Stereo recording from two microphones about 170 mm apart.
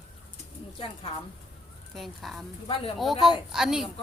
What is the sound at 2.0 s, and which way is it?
A woman's voice, centre (ahead or behind).